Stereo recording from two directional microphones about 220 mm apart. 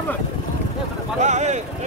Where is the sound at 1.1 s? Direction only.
30° right (ahead or behind).